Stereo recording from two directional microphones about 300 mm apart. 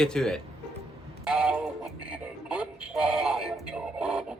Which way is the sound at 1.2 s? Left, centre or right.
Centre.